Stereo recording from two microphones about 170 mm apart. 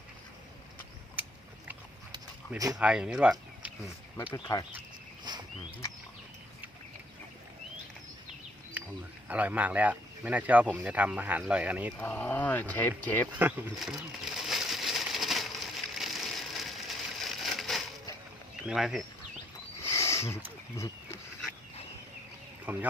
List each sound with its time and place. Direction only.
2.7 s speech: 5° right (ahead or behind)
4.3 s speech: 15° left (ahead or behind)
5.3 s a sound: 25° right (ahead or behind)
9.3 s speech: 10° right (ahead or behind)
11.9 s speech: 10° left (ahead or behind)
13.4 s a sound: 5° right (ahead or behind)
18.7 s speech: 5° right (ahead or behind)
19.9 s a sound: 15° left (ahead or behind)
20.7 s wild animals: 15° left (ahead or behind)
22.6 s speech: 10° right (ahead or behind)